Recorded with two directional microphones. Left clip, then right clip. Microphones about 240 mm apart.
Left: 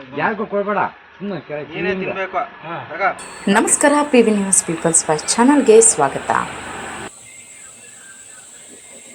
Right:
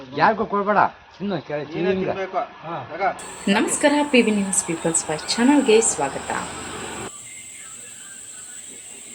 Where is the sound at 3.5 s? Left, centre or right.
Centre.